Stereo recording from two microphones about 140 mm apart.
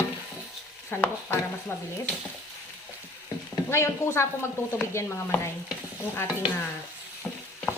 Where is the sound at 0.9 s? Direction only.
15° left (ahead or behind).